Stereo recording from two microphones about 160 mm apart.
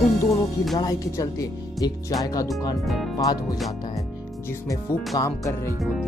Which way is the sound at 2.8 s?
Centre (ahead or behind).